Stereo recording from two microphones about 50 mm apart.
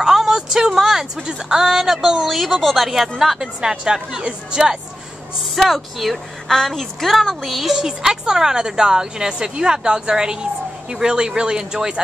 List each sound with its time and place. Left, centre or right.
0.0 s a sound: centre
1.2 s a woman's voice: centre
5.6 s a woman's voice: centre